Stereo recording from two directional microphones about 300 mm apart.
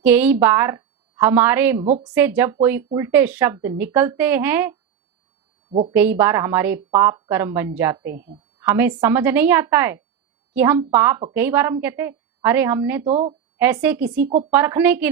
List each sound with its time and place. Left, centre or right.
0.0 s a woman's voice: centre
5.9 s a woman's voice: centre
8.1 s a woman's voice: right
8.6 s a woman's voice: centre
13.1 s speech: right
13.6 s speech: centre
14.1 s speech: right
14.5 s a woman's voice: centre